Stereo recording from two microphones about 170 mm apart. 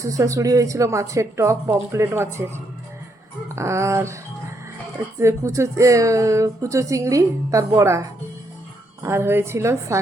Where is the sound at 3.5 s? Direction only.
15° right (ahead or behind).